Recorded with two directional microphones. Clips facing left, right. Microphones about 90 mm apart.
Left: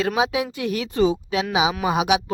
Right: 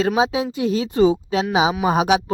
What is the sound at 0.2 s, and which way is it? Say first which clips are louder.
A woman's voice: right 3 dB; 25° right (ahead or behind).